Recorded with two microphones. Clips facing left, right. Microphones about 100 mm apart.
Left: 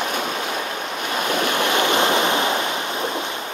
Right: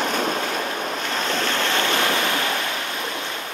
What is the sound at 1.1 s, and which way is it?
Waves, 10° left (ahead or behind).